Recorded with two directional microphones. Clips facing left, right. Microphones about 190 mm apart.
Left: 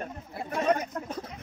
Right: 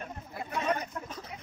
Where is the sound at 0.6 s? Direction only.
45° left (ahead or behind).